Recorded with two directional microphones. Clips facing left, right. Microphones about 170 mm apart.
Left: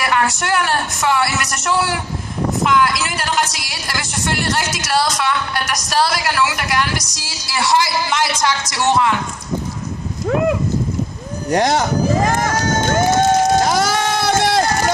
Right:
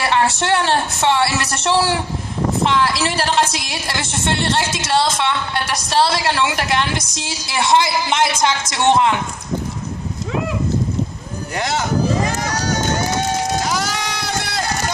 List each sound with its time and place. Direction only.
0.0 s a woman's voice: 25° right (ahead or behind)
11.5 s speech: 45° left (ahead or behind)
12.2 s run: 50° left (ahead or behind)